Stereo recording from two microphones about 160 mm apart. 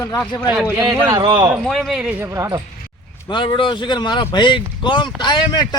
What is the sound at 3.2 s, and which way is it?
A man's voice, 25° left (ahead or behind).